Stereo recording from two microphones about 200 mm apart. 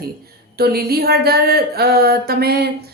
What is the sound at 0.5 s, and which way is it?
A woman's voice, 50° right (ahead or behind).